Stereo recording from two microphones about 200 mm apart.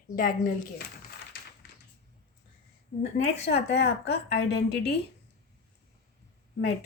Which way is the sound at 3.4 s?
55° left (ahead or behind).